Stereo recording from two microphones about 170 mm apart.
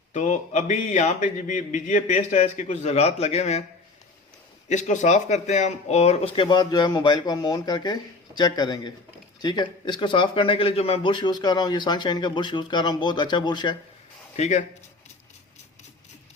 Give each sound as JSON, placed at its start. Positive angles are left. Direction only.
{"t": 0.1, "sound": "a man's voice", "side_deg": 45}
{"t": 4.7, "sound": "a man's voice", "side_deg": 45}
{"t": 14.3, "sound": "speech", "side_deg": 40}